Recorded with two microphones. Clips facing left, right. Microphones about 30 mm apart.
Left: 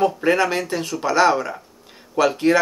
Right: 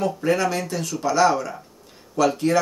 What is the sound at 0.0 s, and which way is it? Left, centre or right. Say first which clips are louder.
Speech: left 3 dB; left.